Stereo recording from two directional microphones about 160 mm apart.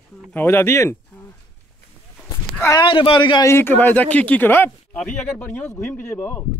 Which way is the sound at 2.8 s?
35° left (ahead or behind).